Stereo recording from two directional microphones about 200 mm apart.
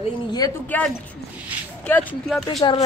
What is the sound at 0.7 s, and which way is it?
Speech, 5° left (ahead or behind).